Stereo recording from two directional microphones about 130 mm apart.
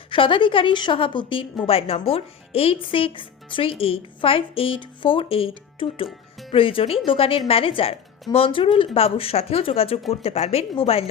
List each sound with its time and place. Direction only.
0.1 s a woman's voice: 40° left (ahead or behind)